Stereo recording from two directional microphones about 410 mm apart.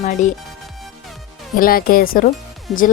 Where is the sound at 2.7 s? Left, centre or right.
Centre.